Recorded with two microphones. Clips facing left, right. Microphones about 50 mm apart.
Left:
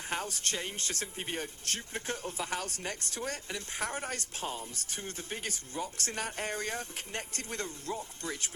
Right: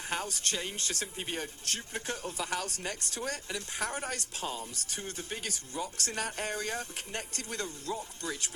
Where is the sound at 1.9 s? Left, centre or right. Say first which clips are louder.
Even; left.